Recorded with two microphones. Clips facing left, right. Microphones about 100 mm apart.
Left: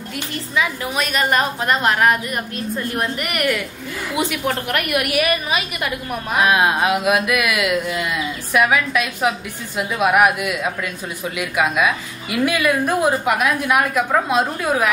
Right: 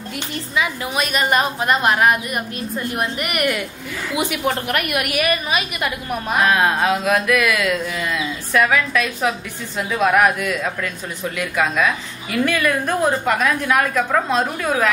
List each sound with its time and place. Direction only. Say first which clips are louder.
0.6 s a woman's voice: even; 20° right (ahead or behind)
6.4 s a woman's voice: left 1 dB; 10° left (ahead or behind)